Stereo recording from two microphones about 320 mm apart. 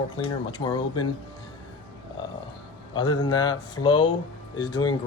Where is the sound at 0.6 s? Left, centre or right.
Centre.